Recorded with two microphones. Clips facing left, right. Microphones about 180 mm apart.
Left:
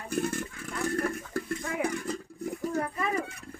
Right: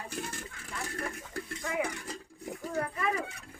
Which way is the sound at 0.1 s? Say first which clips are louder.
Left 9 dB; 50° left (ahead or behind).